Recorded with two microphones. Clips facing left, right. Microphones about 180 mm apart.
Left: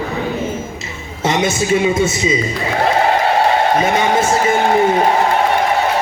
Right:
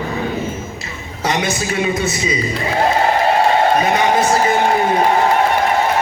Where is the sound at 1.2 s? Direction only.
25° left (ahead or behind).